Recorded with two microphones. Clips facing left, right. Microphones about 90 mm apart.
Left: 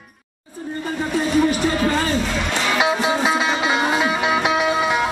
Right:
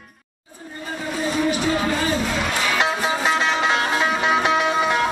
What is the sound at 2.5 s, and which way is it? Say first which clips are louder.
Music: left 4 dB; centre (ahead or behind).